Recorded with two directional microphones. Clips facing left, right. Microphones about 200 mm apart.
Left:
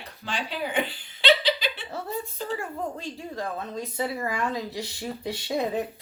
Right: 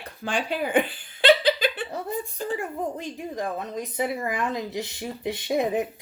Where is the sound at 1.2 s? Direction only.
50° right (ahead or behind).